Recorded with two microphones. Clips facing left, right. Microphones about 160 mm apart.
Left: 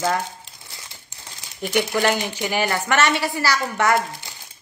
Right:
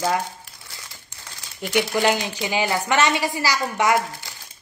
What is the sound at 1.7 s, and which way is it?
Speech, 15° right (ahead or behind).